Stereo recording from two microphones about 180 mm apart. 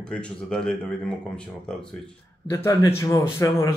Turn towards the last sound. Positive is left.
turn(degrees=15)  # may be behind; listen again after turning